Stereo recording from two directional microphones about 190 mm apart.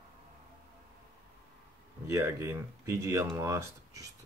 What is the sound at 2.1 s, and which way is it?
Speech, 15° right (ahead or behind).